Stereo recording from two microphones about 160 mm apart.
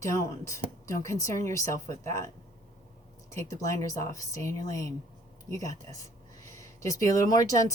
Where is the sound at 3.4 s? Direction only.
20° left (ahead or behind).